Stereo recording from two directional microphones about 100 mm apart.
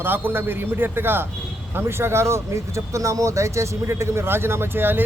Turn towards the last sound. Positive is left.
turn(degrees=-20)  # may be behind; listen again after turning